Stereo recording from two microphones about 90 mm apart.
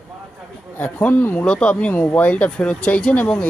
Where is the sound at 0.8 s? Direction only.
20° left (ahead or behind).